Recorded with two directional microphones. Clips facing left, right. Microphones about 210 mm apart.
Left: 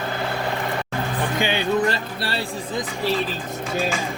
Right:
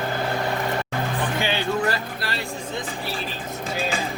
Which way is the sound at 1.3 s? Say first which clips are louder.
Left 5 dB; 15° left (ahead or behind).